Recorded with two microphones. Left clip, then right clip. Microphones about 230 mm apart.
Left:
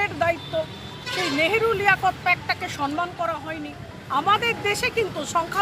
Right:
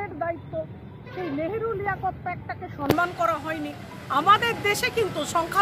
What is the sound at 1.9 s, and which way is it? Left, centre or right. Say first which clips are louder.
Speech: left 9 dB; centre.